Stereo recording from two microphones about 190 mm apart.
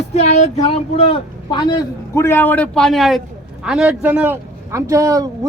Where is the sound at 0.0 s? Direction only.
35° left (ahead or behind).